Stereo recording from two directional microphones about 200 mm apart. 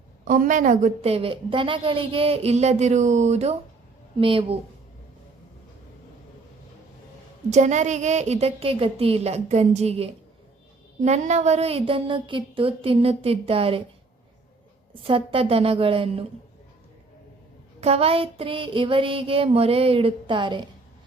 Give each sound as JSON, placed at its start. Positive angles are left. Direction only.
{"t": 0.3, "sound": "a woman's voice", "side_deg": -40}
{"t": 4.2, "sound": "child singing", "side_deg": -25}
{"t": 7.5, "sound": "a woman's voice", "side_deg": -35}
{"t": 11.0, "sound": "child singing", "side_deg": -35}
{"t": 15.0, "sound": "child singing", "side_deg": -25}
{"t": 17.7, "sound": "child singing", "side_deg": -30}